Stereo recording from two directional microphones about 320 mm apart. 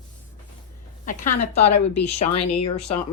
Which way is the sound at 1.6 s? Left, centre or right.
Left.